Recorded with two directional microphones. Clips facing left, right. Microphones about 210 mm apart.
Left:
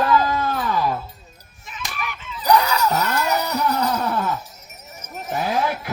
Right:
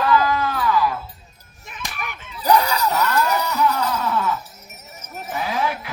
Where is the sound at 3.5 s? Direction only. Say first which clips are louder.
Even; 40° left (ahead or behind).